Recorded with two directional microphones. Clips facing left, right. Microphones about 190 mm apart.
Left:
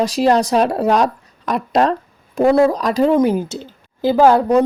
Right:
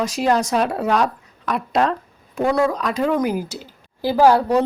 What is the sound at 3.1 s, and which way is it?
A woman's voice, 25° left (ahead or behind).